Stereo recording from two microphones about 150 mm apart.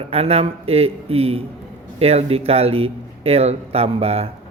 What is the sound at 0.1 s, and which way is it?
Speech, 40° right (ahead or behind).